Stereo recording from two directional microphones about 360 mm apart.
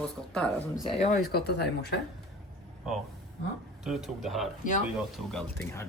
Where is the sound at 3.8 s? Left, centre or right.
Centre.